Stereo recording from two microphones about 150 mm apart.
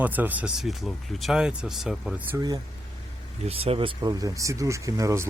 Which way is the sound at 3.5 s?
40° right (ahead or behind).